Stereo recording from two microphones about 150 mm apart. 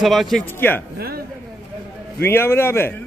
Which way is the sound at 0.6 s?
15° left (ahead or behind).